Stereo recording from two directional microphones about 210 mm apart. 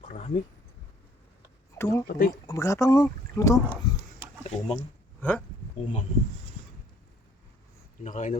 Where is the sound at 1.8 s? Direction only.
15° left (ahead or behind).